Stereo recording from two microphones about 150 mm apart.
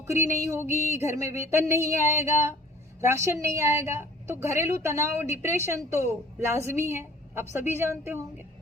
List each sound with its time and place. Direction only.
0.0 s a woman's voice: 20° right (ahead or behind)